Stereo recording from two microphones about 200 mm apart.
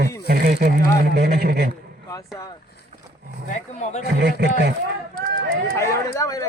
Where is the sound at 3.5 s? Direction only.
35° left (ahead or behind).